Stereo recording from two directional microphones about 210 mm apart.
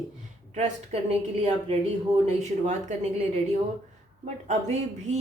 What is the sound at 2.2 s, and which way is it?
Speech, 35° right (ahead or behind).